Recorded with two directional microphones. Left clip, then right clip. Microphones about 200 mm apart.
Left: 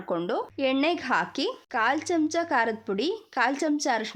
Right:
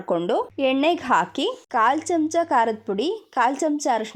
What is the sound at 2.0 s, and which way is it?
Speech, centre (ahead or behind).